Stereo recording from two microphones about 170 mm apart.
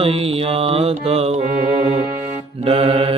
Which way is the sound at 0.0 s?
35° right (ahead or behind).